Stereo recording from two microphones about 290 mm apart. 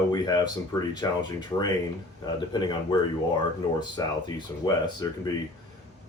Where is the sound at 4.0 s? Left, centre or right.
Centre.